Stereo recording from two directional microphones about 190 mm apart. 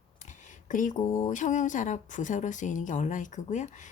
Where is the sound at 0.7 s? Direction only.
45° left (ahead or behind).